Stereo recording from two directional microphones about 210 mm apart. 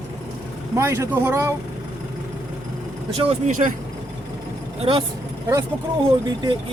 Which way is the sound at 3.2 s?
30° right (ahead or behind).